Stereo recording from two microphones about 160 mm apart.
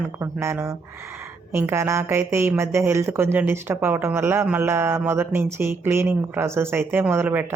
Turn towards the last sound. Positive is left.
turn(degrees=-15)  # may be behind; listen again after turning